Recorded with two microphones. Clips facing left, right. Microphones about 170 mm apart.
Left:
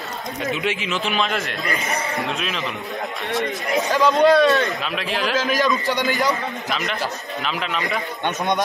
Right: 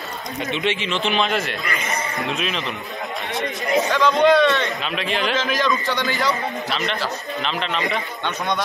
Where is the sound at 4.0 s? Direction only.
40° left (ahead or behind).